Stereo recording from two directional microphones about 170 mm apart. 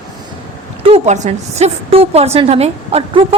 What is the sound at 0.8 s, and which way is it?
A woman's voice, 35° right (ahead or behind).